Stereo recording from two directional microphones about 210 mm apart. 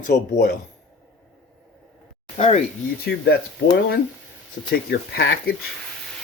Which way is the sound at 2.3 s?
30° left (ahead or behind).